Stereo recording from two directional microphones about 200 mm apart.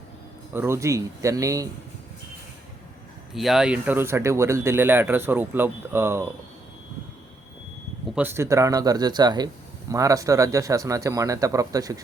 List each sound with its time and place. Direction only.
0.5 s speech: 10° right (ahead or behind)
3.3 s speech: centre (ahead or behind)
8.1 s speech: 10° right (ahead or behind)